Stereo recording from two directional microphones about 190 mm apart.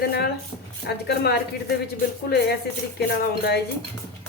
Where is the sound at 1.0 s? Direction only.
60° left (ahead or behind).